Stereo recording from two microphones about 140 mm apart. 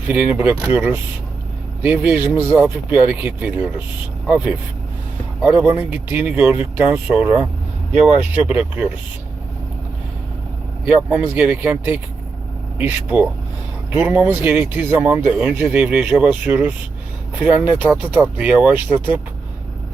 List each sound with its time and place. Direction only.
0.1 s speech: 10° right (ahead or behind)
8.4 s speech: 10° right (ahead or behind)
10.8 s speech: 10° right (ahead or behind)